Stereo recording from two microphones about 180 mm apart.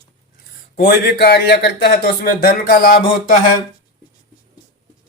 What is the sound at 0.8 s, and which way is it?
Speech, 60° left (ahead or behind).